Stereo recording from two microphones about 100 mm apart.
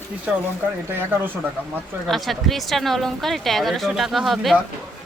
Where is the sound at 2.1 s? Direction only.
Centre (ahead or behind).